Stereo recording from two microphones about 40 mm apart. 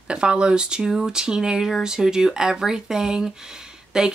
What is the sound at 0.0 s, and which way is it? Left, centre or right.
Speech, right.